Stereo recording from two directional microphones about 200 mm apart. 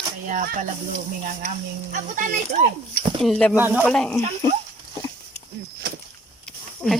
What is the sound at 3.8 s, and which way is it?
Speech, centre (ahead or behind).